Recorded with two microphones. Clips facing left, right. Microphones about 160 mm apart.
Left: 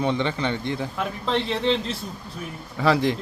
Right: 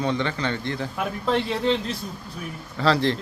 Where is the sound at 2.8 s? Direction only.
15° left (ahead or behind).